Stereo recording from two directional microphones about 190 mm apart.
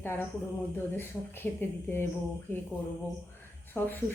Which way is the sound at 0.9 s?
10° left (ahead or behind).